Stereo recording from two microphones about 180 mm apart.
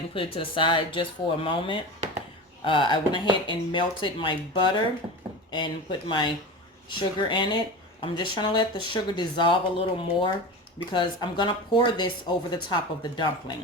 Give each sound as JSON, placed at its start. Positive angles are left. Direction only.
{"t": 0.1, "sound": "speech", "side_deg": 30}